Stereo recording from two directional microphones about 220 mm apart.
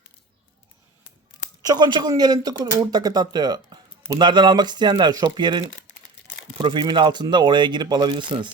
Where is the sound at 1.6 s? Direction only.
20° right (ahead or behind).